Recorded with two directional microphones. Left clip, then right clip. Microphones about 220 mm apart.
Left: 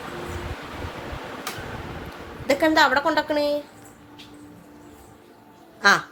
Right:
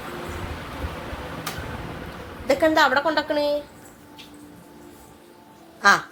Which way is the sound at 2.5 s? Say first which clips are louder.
Even; 15° left (ahead or behind).